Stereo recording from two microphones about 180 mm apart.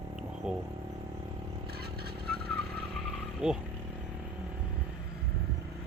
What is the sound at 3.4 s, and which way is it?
Vehicle, 5° right (ahead or behind).